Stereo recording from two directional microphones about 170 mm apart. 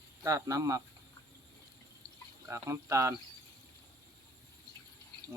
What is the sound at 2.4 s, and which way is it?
Speech, 20° right (ahead or behind).